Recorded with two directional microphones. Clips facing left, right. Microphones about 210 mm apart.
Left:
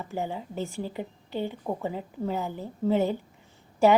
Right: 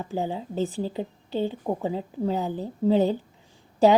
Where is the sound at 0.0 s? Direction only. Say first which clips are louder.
Right 3 dB; 15° right (ahead or behind).